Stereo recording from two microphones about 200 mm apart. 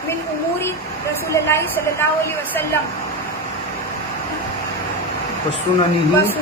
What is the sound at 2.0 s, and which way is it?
Speech, 10° left (ahead or behind).